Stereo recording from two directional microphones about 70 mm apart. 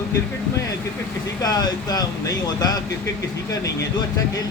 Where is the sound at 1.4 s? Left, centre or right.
Left.